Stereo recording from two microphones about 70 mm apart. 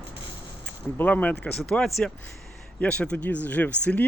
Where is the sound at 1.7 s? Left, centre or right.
Centre.